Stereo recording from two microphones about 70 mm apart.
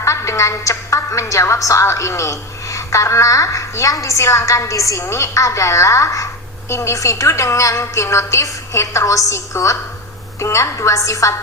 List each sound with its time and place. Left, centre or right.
0.0 s a woman's voice: left